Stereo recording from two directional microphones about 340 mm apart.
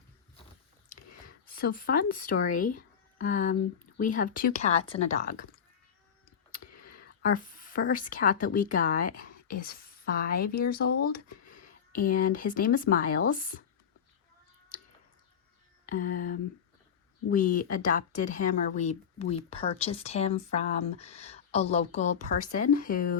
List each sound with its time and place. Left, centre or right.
1.5 s speech: left
6.6 s clicking: left
6.8 s speech: left
15.9 s speech: left